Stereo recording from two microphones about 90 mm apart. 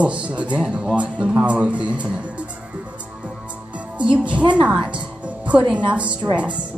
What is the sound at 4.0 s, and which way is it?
Speech, 15° right (ahead or behind).